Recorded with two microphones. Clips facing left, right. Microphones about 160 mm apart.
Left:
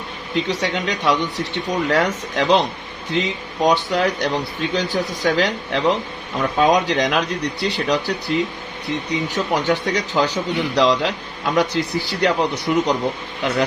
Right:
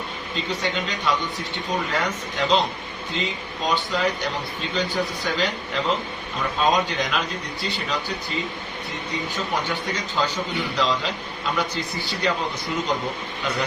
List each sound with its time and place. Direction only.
0.3 s speech: 85° left